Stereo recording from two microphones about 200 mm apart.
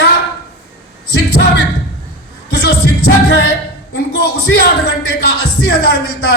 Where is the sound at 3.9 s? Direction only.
55° left (ahead or behind).